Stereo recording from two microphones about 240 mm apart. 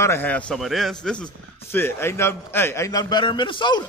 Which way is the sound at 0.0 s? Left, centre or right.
Centre.